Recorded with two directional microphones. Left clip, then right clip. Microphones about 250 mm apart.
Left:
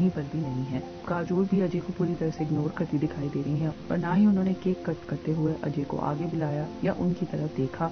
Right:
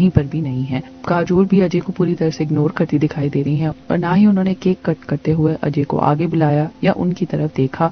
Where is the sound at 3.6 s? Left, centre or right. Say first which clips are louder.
Right 11 dB; right.